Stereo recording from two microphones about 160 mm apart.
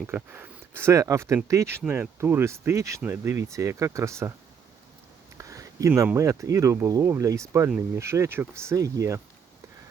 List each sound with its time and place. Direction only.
0.1 s speech: 15° right (ahead or behind)
5.4 s a sound: 20° right (ahead or behind)
6.1 s speech: 20° right (ahead or behind)